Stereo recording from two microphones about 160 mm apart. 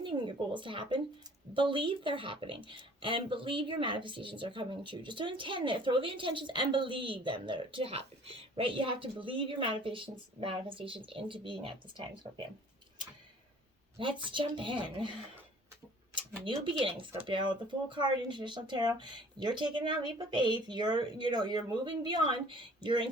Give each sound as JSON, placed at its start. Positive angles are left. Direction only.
{"t": 0.0, "sound": "speech", "side_deg": -30}
{"t": 14.0, "sound": "speech", "side_deg": -30}
{"t": 16.4, "sound": "speech", "side_deg": -30}